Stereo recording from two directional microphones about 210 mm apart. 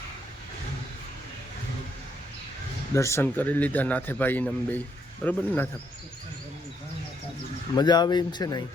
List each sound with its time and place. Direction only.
2.9 s a man's voice: 15° left (ahead or behind)
7.8 s speech: 20° left (ahead or behind)